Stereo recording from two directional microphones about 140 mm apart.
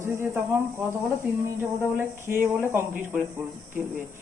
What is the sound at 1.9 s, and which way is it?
Speech, 15° right (ahead or behind).